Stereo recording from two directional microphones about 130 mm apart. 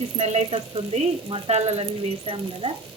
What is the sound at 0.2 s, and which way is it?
Speech, 50° right (ahead or behind).